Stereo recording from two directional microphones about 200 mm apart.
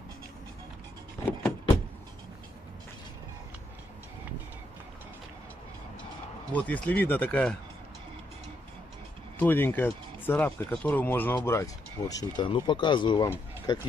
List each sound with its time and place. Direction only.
6.5 s speech: 5° left (ahead or behind)
9.4 s speech: 10° left (ahead or behind)